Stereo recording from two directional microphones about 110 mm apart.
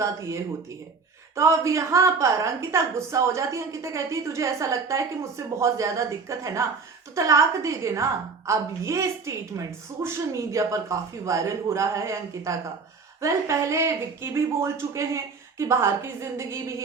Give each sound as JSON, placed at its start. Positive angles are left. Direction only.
{"t": 0.0, "sound": "a woman's voice", "side_deg": -25}
{"t": 1.4, "sound": "a woman's voice", "side_deg": -25}